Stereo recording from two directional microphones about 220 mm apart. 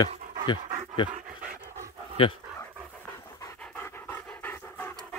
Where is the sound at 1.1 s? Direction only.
35° right (ahead or behind).